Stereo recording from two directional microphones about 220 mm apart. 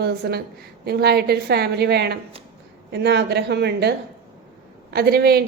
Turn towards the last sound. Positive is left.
turn(degrees=-45)  # may be behind; listen again after turning